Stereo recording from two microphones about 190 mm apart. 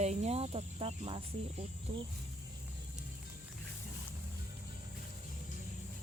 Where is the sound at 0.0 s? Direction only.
35° right (ahead or behind).